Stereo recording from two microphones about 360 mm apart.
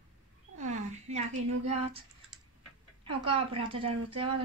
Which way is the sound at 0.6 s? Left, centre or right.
Centre.